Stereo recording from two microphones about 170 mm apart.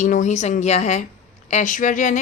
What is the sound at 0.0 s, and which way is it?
A woman's voice, 45° left (ahead or behind).